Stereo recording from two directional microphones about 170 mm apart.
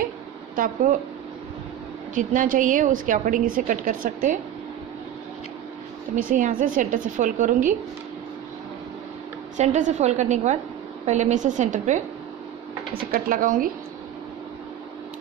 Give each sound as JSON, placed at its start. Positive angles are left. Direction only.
{"t": 2.1, "sound": "a woman's voice", "side_deg": -50}
{"t": 6.1, "sound": "a woman's voice", "side_deg": -55}
{"t": 9.6, "sound": "a woman's voice", "side_deg": -45}
{"t": 12.9, "sound": "speech", "side_deg": -60}